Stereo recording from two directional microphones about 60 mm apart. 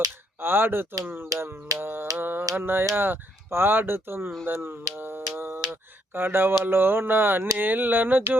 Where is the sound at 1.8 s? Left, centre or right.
Right.